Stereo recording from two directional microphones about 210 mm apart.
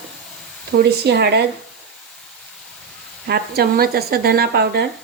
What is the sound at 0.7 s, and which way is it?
Speech, 50° right (ahead or behind).